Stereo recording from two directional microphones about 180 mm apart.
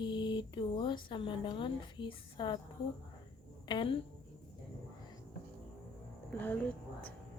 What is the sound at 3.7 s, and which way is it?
Speech, 30° left (ahead or behind).